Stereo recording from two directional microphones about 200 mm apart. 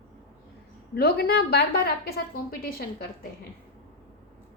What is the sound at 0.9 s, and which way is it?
A woman's voice, 50° left (ahead or behind).